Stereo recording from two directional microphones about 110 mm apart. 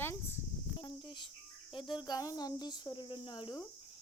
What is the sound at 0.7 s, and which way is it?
Speech, 45° left (ahead or behind).